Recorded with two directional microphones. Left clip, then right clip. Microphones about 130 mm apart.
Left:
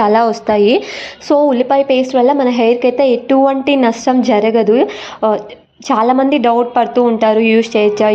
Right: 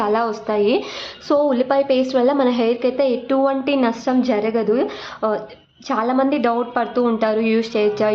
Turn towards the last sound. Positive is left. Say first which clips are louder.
# left 7 dB
turn(degrees=25)  # may be behind; listen again after turning